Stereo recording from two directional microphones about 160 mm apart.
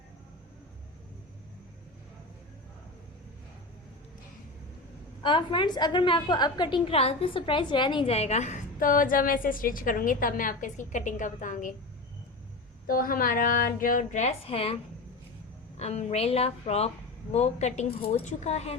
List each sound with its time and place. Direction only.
5.2 s a woman's voice: 30° left (ahead or behind); by 11.7 s 55° left (ahead or behind)
12.9 s a woman's voice: 65° left (ahead or behind); by 14.8 s 35° left (ahead or behind)
15.8 s a woman's voice: 45° left (ahead or behind)